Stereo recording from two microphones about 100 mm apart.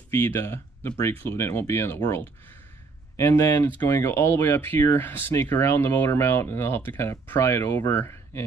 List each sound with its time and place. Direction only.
0.1 s speech: 25° left (ahead or behind)
3.2 s speech: 30° left (ahead or behind)